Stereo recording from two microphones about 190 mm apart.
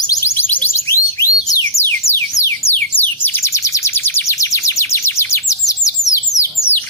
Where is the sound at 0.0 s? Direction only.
20° left (ahead or behind).